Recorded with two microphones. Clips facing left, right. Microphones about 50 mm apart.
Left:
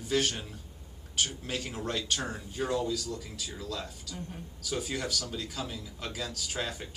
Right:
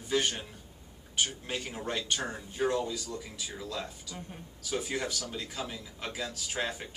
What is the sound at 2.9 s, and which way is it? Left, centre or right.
A man's voice, right.